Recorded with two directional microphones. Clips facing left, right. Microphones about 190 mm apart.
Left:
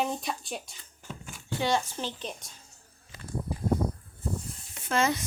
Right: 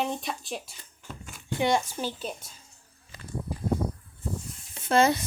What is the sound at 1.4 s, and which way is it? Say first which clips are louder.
Speech: right 3 dB; 15° right (ahead or behind).